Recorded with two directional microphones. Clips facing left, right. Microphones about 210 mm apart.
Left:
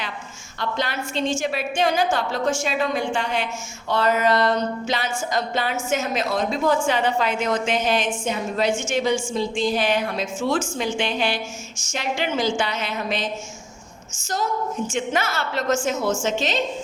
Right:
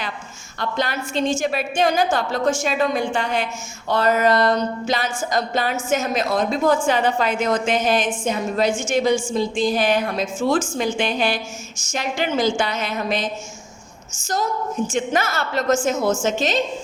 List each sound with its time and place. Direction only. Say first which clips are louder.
0.6 s a woman's voice: right 2 dB; 45° right (ahead or behind)
14.9 s a woman's voice: right 2 dB; 40° right (ahead or behind)